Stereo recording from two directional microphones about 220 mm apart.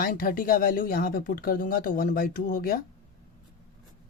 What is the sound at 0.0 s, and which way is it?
Speech, 40° left (ahead or behind).